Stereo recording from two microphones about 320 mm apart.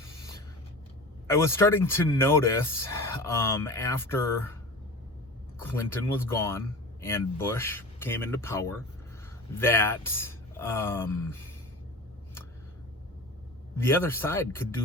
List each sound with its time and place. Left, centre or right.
1.3 s a man's voice: centre
5.6 s a man's voice: centre
13.7 s a man's voice: centre